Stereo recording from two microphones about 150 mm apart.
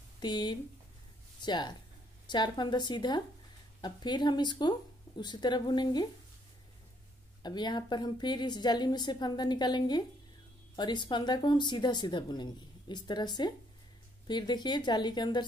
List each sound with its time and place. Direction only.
0.2 s a woman's voice: 30° left (ahead or behind)
7.4 s a woman's voice: 30° left (ahead or behind)